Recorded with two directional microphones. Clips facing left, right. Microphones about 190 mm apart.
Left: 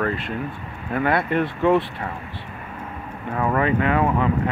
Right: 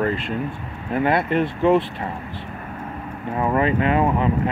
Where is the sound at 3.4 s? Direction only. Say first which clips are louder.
Right 1 dB; 20° right (ahead or behind).